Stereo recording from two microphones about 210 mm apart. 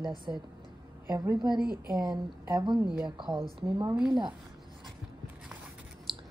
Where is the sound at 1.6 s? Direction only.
20° left (ahead or behind).